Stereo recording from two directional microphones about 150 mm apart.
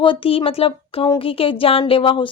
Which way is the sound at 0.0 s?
35° left (ahead or behind).